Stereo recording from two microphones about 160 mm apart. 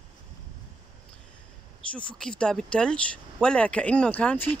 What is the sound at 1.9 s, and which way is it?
Speech, 5° left (ahead or behind).